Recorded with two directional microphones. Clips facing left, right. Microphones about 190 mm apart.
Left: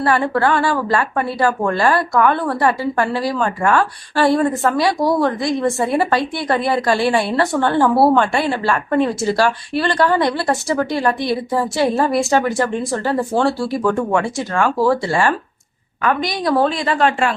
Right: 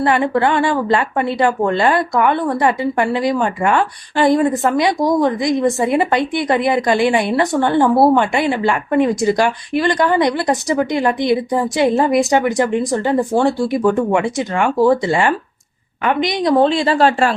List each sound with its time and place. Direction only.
0.0 s a woman's voice: 20° right (ahead or behind); by 17.3 s 35° right (ahead or behind)